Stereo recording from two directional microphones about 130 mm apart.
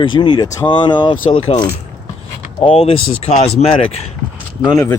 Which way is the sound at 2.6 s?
50° left (ahead or behind).